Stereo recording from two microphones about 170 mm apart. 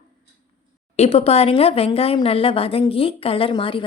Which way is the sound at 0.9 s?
35° left (ahead or behind).